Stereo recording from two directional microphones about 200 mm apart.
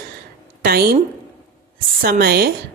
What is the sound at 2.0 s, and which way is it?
Speech, 50° right (ahead or behind).